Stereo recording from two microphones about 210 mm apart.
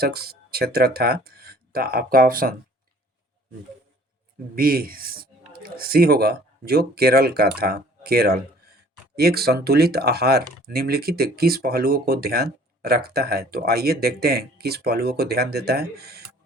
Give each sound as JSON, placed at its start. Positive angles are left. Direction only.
{"t": 0.0, "sound": "speech", "side_deg": -50}
{"t": 4.5, "sound": "speech", "side_deg": -45}